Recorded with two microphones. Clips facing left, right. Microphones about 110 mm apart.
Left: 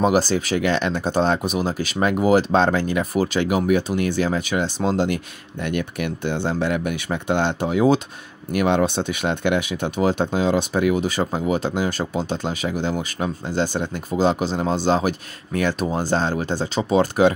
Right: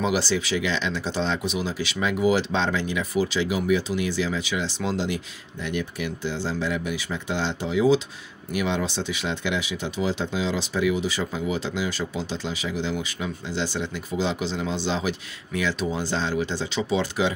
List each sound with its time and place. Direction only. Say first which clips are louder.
0.0 s speech: left 6 dB; 45° left (ahead or behind)